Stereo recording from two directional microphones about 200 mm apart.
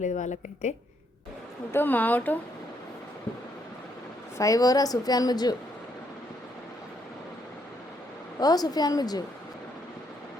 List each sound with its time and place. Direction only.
0.0 s a woman's voice: 35° left (ahead or behind)
1.7 s speech: 10° left (ahead or behind)
4.4 s a woman's voice: 15° left (ahead or behind)
8.4 s a woman's voice: 20° left (ahead or behind)